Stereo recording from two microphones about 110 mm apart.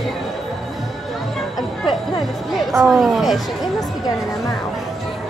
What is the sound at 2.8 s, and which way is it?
Speech, centre (ahead or behind).